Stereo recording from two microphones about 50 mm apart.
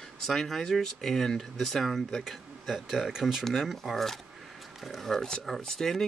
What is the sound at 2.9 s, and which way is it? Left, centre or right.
Speech, centre.